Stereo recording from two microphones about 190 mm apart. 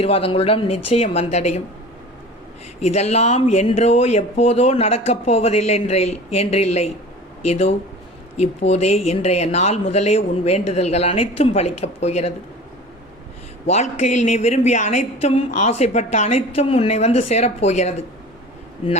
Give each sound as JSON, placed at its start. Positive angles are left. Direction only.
{"t": 0.0, "sound": "speech", "side_deg": 30}
{"t": 2.8, "sound": "speech", "side_deg": 35}
{"t": 13.7, "sound": "speech", "side_deg": 35}